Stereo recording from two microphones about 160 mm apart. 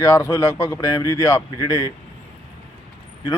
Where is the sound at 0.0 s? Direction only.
15° left (ahead or behind).